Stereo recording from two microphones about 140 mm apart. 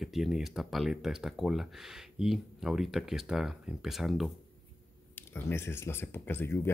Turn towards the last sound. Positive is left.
turn(degrees=15)  # may be behind; listen again after turning